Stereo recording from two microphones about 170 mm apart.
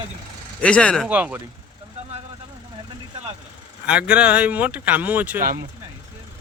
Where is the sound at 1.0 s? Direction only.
10° right (ahead or behind).